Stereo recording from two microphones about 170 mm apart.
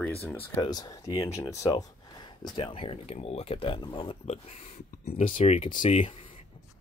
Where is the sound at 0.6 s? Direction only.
20° left (ahead or behind); by 6.1 s 35° left (ahead or behind).